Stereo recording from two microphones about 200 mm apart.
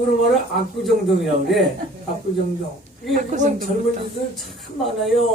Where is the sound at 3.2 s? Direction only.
40° right (ahead or behind).